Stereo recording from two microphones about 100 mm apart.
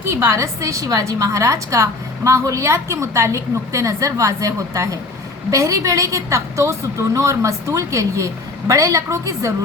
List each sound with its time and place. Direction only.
0.0 s a woman's voice: 30° right (ahead or behind)